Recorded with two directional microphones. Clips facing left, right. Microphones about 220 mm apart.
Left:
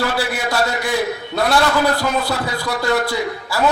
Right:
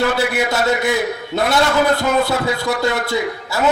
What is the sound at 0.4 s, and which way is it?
A man's voice, 25° right (ahead or behind).